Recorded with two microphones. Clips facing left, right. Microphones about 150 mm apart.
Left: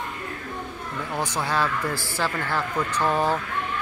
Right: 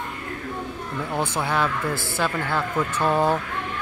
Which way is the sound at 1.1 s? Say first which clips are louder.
Right 1 dB; 20° right (ahead or behind).